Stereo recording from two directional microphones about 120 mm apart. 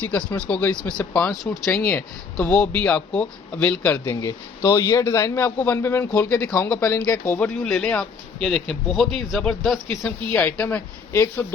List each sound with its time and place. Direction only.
0.1 s speech: 10° left (ahead or behind)
4.1 s speech: 30° left (ahead or behind)
6.5 s speech: 30° left (ahead or behind)
6.7 s speech: 20° left (ahead or behind); by 9.8 s 5° left (ahead or behind)
10.2 s speech: 15° left (ahead or behind)